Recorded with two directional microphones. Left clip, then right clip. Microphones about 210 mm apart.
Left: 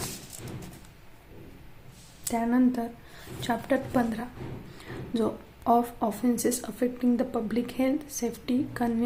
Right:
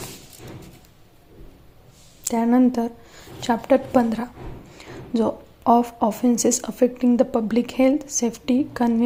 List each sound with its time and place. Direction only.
2.2 s speech: 30° right (ahead or behind)